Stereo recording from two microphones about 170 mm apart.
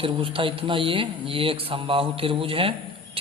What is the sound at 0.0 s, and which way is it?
A man's voice, 30° right (ahead or behind).